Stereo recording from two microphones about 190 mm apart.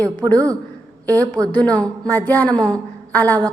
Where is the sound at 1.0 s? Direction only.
10° left (ahead or behind).